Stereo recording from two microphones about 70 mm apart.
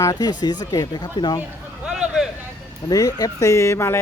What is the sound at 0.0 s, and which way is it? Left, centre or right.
Speech, left.